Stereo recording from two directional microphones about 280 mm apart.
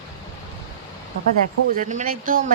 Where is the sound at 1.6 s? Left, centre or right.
Right.